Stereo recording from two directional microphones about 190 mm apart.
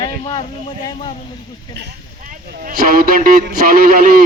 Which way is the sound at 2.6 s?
50° right (ahead or behind).